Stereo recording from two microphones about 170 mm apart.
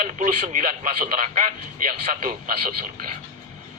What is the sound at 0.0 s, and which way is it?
A man's voice, 50° right (ahead or behind).